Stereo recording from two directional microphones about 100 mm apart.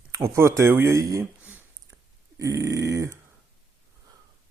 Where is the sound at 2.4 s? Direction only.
35° right (ahead or behind).